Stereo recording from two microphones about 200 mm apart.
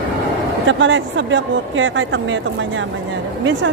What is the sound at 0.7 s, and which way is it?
Speech, 70° right (ahead or behind).